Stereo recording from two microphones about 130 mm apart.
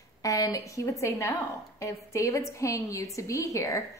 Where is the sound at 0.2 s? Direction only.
25° left (ahead or behind).